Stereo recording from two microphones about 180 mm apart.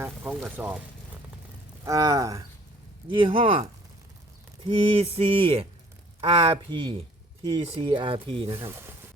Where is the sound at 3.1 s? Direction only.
30° right (ahead or behind).